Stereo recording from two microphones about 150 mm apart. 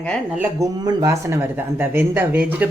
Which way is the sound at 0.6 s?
25° right (ahead or behind).